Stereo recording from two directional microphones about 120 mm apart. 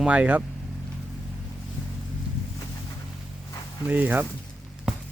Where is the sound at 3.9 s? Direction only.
15° right (ahead or behind).